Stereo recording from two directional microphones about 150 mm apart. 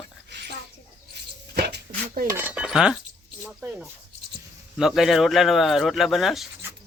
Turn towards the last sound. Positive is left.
turn(degrees=0)  # may be behind; listen again after turning